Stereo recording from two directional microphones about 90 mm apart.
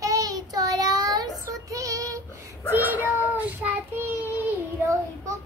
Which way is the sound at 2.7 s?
20° right (ahead or behind).